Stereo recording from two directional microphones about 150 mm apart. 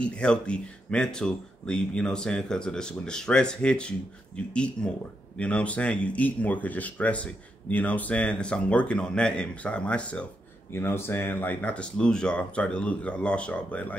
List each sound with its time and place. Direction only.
0.0 s speech: 5° left (ahead or behind)